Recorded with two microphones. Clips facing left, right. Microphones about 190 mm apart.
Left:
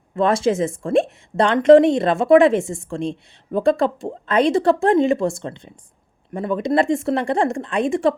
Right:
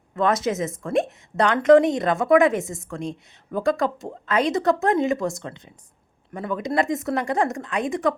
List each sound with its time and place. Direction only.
0.1 s a woman's voice: 30° left (ahead or behind)